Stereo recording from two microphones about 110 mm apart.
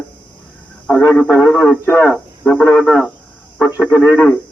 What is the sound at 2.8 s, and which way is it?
Speech, 5° left (ahead or behind).